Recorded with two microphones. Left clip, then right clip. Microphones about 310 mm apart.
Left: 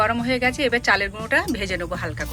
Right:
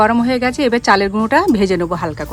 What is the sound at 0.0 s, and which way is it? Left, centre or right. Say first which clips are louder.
Speech: right 6 dB; right.